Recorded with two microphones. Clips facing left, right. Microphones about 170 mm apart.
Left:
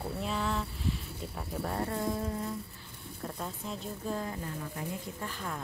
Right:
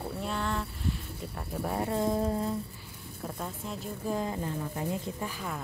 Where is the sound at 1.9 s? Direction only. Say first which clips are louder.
Right 5 dB; 25° right (ahead or behind).